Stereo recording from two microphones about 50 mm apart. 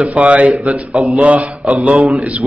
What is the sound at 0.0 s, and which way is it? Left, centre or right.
Speech, right.